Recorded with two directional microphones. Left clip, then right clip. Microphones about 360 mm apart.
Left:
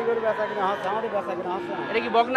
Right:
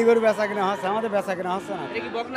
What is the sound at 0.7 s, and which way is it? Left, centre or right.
Speech, right.